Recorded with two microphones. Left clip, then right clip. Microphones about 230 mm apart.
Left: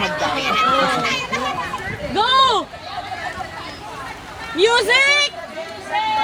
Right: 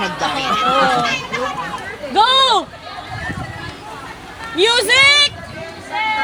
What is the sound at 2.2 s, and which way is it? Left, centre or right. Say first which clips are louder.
Speech: right 3 dB; right.